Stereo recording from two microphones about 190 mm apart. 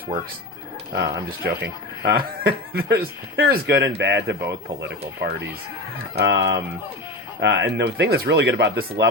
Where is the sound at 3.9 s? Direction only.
65° right (ahead or behind).